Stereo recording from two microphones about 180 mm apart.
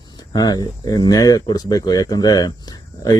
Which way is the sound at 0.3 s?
20° left (ahead or behind).